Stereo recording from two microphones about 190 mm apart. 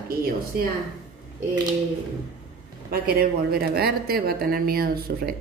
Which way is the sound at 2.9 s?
50° right (ahead or behind).